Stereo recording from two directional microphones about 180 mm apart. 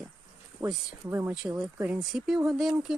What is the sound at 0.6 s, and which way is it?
Speech, 20° right (ahead or behind).